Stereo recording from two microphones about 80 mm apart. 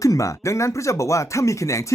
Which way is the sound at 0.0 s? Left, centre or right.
Left.